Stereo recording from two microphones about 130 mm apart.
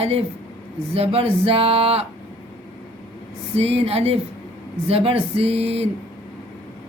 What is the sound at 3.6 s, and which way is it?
Speech, 50° right (ahead or behind).